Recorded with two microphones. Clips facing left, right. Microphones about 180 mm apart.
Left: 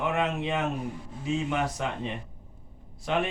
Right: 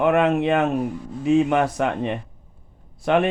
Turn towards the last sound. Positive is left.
turn(degrees=-60)  # may be behind; listen again after turning